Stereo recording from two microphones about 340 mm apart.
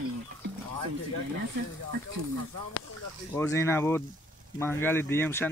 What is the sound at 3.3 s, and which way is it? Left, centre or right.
Speech, centre.